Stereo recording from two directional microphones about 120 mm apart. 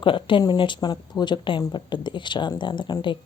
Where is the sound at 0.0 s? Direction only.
45° left (ahead or behind).